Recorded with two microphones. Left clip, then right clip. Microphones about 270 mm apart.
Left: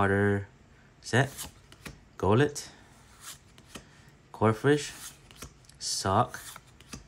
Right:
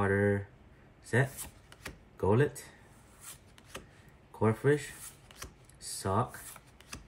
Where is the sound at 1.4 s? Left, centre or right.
Centre.